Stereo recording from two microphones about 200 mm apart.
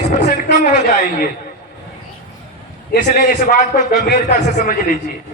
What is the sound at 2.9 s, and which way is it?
A man's voice, 45° left (ahead or behind).